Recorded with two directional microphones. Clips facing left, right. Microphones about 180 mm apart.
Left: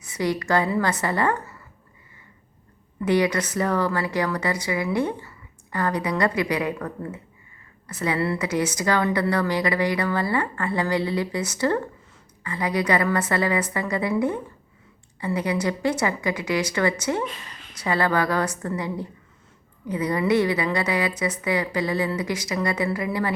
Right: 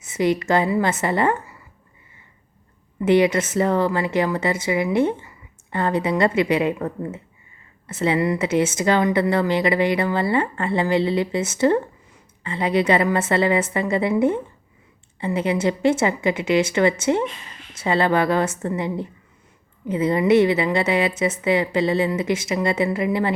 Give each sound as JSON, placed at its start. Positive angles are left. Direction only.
{"t": 0.0, "sound": "a woman's voice", "side_deg": -20}
{"t": 3.0, "sound": "a woman's voice", "side_deg": -25}